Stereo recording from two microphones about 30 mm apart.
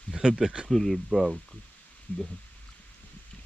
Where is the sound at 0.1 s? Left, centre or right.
Right.